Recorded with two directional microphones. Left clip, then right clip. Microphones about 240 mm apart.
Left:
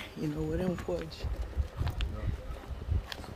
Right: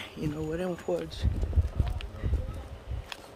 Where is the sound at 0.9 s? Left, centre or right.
Right.